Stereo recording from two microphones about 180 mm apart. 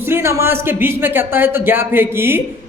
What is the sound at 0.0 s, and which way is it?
A man's voice, 15° right (ahead or behind).